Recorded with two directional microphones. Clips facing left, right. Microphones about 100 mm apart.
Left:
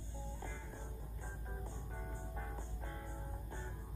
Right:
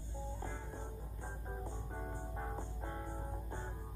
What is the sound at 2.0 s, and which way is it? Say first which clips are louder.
Music: right 4 dB; 30° right (ahead or behind).